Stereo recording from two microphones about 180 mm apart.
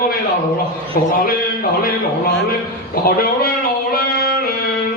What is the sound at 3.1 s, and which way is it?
Speech, 55° left (ahead or behind).